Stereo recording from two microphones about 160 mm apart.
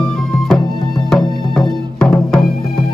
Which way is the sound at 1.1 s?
Centre (ahead or behind).